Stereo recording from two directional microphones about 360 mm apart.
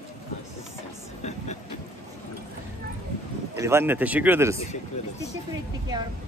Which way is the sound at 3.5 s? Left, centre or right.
Centre.